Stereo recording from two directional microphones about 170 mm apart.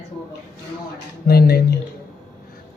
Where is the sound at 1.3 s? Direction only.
65° left (ahead or behind).